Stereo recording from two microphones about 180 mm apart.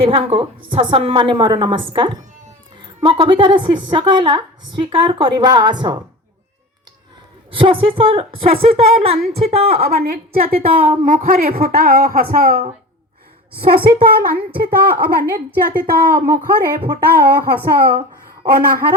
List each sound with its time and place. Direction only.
0.0 s a woman's voice: 30° right (ahead or behind)
7.5 s a woman's voice: 30° right (ahead or behind)
9.8 s a woman's voice: 60° right (ahead or behind)
10.8 s a woman's voice: 30° right (ahead or behind)
11.0 s speech: 50° right (ahead or behind)
13.8 s a woman's voice: 55° right (ahead or behind)